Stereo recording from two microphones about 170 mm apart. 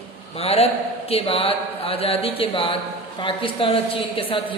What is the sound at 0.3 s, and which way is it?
A man's voice, 35° left (ahead or behind).